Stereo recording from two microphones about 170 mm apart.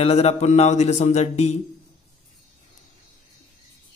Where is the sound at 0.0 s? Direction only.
40° left (ahead or behind).